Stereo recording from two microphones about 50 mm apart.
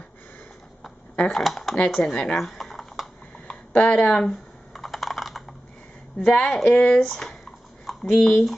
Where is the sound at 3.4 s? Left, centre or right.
Left.